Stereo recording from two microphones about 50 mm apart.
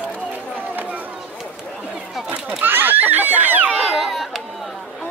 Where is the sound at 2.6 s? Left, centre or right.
Right.